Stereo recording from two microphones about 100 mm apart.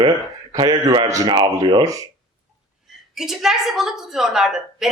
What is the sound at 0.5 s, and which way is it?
Speech, 50° right (ahead or behind).